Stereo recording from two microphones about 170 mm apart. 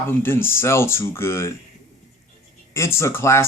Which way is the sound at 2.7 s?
15° left (ahead or behind).